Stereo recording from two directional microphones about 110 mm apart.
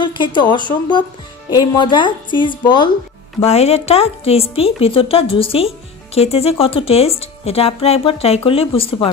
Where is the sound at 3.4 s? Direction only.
70° left (ahead or behind).